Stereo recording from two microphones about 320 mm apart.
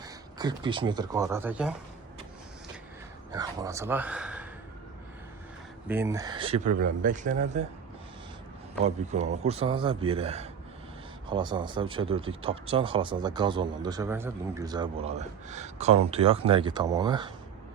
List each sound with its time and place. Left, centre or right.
0.0 s speech: centre
3.3 s a man's voice: centre
5.9 s a man's voice: centre
8.8 s a man's voice: right